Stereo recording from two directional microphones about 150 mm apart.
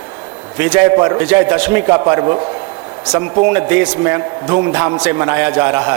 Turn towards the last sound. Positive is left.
turn(degrees=-10)  # may be behind; listen again after turning